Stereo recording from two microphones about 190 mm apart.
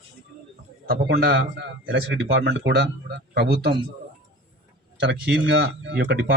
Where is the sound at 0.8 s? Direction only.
55° right (ahead or behind).